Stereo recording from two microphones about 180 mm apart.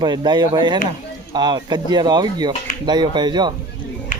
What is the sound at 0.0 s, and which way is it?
Speech, 25° right (ahead or behind).